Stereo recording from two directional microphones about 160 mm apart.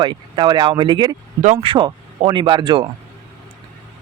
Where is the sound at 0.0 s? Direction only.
30° right (ahead or behind).